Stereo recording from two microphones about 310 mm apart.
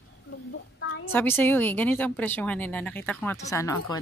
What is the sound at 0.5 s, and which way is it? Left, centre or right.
Speech, left.